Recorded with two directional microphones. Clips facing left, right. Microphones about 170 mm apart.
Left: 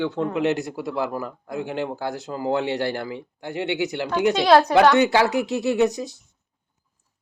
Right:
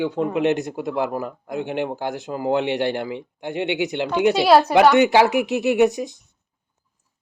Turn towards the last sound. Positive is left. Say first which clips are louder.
# right 3 dB
turn(degrees=-15)  # may be behind; listen again after turning